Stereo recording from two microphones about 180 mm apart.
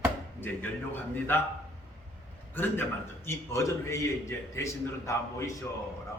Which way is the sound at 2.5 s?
10° left (ahead or behind).